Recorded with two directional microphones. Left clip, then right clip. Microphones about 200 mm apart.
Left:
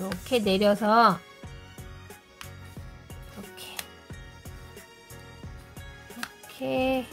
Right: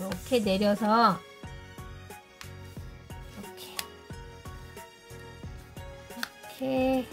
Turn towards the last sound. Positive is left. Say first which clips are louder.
# left 1 dB
turn(degrees=20)  # may be behind; listen again after turning